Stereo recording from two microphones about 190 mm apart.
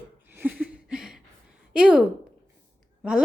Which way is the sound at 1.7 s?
5° right (ahead or behind).